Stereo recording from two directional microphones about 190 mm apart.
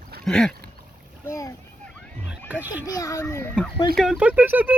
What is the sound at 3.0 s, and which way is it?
Speech, 15° left (ahead or behind).